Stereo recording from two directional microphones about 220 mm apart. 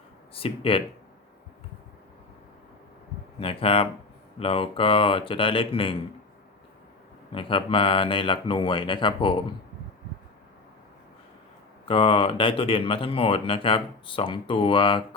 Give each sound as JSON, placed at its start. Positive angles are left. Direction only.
{"t": 0.3, "sound": "speech", "side_deg": 25}
{"t": 3.4, "sound": "speech", "side_deg": 25}
{"t": 7.3, "sound": "speech", "side_deg": 25}
{"t": 11.9, "sound": "speech", "side_deg": 25}